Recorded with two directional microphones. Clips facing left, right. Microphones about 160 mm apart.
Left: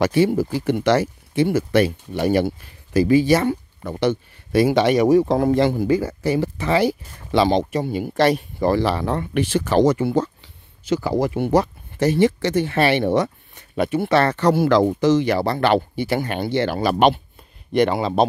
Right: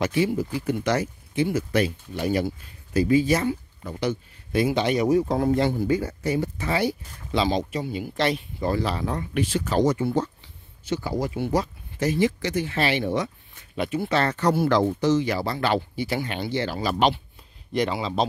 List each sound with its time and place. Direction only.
0.0 s speech: 65° left (ahead or behind)
0.6 s speech: 80° left
7.3 s speech: 60° left (ahead or behind)